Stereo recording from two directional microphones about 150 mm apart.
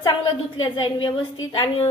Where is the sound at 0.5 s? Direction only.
35° left (ahead or behind).